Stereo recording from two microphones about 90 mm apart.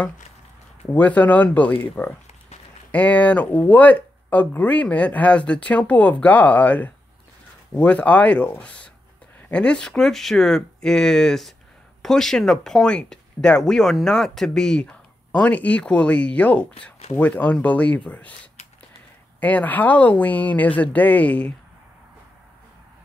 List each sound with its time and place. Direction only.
0.9 s speech: 20° left (ahead or behind)
2.9 s speech: 15° left (ahead or behind)